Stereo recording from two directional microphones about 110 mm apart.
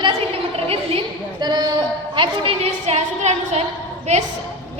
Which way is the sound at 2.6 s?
85° right.